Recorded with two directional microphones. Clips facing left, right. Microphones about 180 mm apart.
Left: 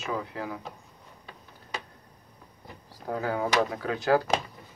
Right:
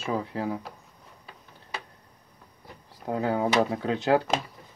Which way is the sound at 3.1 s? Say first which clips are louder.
Right 3 dB; 25° right (ahead or behind).